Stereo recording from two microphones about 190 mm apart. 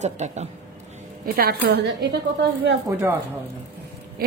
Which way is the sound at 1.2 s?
55° right (ahead or behind).